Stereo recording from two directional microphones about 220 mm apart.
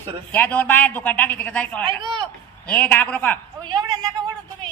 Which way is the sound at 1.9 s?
20° right (ahead or behind).